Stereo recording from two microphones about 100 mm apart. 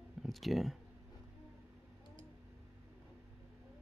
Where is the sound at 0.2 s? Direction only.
Centre (ahead or behind).